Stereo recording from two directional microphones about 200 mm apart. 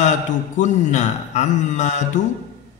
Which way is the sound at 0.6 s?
35° left (ahead or behind).